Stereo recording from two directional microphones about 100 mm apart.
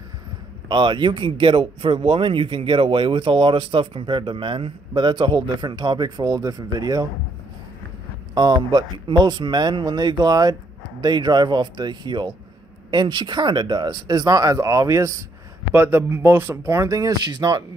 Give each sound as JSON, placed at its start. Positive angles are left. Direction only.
{"t": 0.7, "sound": "a man's voice", "side_deg": -50}
{"t": 8.4, "sound": "speech", "side_deg": -45}